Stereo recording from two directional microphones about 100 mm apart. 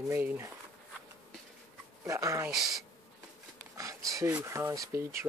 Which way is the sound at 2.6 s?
Centre (ahead or behind).